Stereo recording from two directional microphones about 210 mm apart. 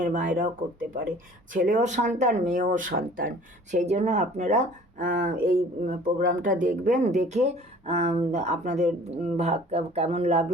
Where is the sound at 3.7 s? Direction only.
30° right (ahead or behind).